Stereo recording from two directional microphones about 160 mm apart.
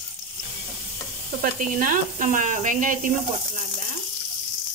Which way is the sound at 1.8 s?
50° right (ahead or behind).